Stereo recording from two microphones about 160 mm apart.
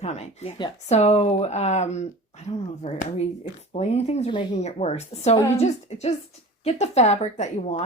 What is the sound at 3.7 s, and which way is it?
Speech, 45° left (ahead or behind).